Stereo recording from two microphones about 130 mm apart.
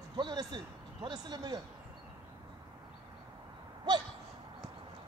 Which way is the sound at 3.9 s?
35° right (ahead or behind).